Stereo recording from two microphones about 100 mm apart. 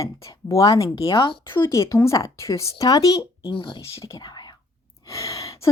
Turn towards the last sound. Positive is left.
turn(degrees=35)  # may be behind; listen again after turning